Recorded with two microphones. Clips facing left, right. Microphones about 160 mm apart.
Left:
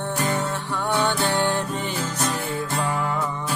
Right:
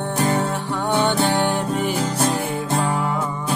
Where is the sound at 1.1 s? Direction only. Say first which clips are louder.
Right 3 dB; 15° right (ahead or behind).